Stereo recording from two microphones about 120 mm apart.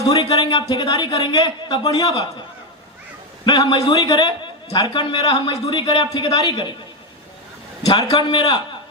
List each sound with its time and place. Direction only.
0.1 s a man's voice: 40° left (ahead or behind)
3.4 s a man's voice: 35° left (ahead or behind)
7.9 s a man's voice: 35° left (ahead or behind)